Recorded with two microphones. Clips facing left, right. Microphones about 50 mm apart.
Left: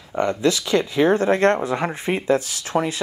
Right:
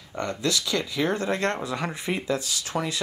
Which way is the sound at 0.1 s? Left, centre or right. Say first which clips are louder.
Left 7 dB; left.